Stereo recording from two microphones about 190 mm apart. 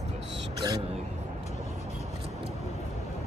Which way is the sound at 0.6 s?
25° right (ahead or behind).